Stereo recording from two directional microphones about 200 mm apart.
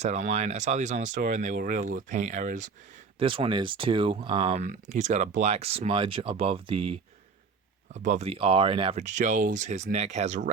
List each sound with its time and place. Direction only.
0.0 s speech: 35° right (ahead or behind)
3.2 s speech: 25° right (ahead or behind)